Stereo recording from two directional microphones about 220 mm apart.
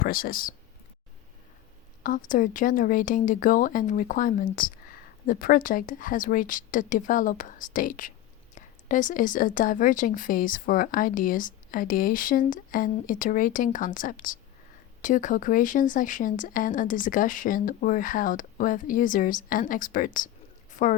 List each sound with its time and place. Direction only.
0.0 s speech: 40° left (ahead or behind)
2.0 s speech: 35° left (ahead or behind)